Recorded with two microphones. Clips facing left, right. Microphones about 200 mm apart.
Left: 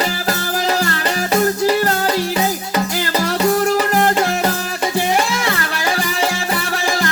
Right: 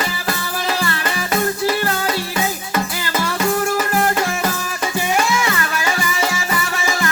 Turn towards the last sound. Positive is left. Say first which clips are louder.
# left 2 dB
turn(degrees=35)  # may be behind; listen again after turning